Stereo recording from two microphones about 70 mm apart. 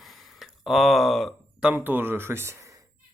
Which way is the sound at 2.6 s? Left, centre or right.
Right.